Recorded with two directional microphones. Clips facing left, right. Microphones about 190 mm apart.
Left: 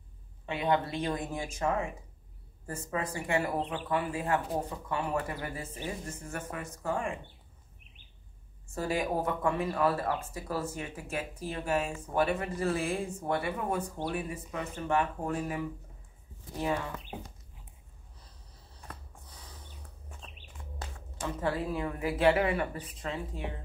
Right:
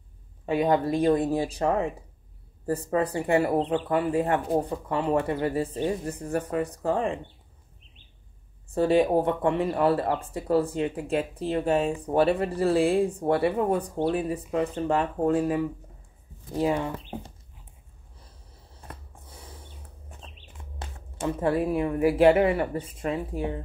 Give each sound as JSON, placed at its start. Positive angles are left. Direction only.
{"t": 0.5, "sound": "speech", "side_deg": -35}
{"t": 8.7, "sound": "speech", "side_deg": -30}
{"t": 18.9, "sound": "a sound", "side_deg": -25}
{"t": 20.8, "sound": "speech", "side_deg": -25}